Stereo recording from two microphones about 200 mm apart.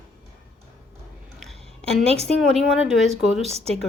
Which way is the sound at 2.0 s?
30° right (ahead or behind).